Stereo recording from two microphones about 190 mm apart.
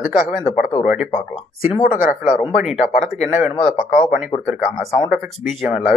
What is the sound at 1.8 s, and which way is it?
Speech, 40° left (ahead or behind).